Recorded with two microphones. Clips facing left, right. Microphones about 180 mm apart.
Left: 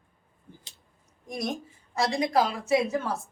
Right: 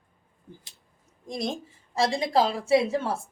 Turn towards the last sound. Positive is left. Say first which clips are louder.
# right 3 dB
turn(degrees=-30)  # may be behind; listen again after turning